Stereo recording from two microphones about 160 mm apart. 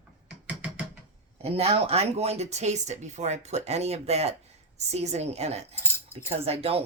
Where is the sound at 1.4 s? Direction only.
40° right (ahead or behind).